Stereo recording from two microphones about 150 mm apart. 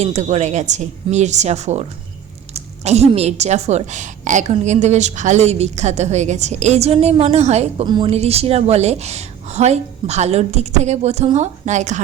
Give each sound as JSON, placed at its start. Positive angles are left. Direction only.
{"t": 0.0, "sound": "a woman's voice", "side_deg": -45}
{"t": 7.9, "sound": "a woman's voice", "side_deg": -30}
{"t": 8.1, "sound": "a woman's voice", "side_deg": -45}